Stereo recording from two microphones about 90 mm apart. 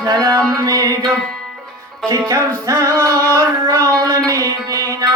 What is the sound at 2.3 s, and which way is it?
Music, 30° right (ahead or behind).